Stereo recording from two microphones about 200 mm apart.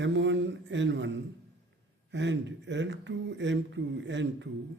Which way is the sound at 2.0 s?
65° right (ahead or behind).